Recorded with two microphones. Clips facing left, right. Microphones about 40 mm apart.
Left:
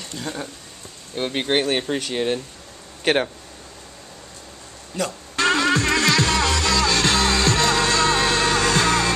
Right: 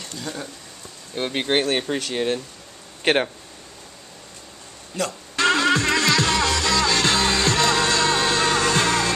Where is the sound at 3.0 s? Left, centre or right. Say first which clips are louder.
Even; centre.